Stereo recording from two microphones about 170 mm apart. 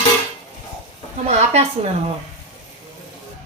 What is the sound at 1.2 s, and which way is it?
Speech, 40° right (ahead or behind).